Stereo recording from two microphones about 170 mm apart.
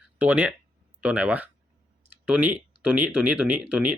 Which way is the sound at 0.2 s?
10° right (ahead or behind).